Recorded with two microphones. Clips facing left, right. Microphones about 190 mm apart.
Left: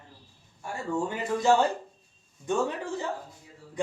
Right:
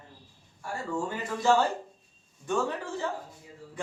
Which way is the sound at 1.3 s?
20° left (ahead or behind).